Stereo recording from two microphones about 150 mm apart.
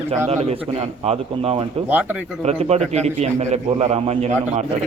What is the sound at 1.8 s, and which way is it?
Speech, 10° right (ahead or behind).